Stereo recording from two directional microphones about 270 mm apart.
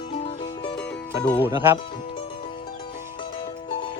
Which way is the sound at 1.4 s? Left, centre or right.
Centre.